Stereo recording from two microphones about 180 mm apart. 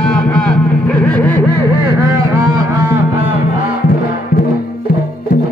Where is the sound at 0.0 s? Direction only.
5° left (ahead or behind).